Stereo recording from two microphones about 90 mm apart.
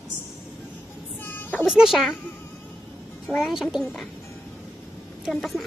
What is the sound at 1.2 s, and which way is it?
Child singing, 20° left (ahead or behind).